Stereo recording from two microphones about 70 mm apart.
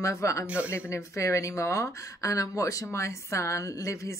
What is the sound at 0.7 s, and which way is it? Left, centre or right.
A woman's voice, left.